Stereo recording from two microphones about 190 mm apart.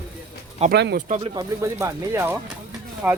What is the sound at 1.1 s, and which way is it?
Speech, 30° right (ahead or behind).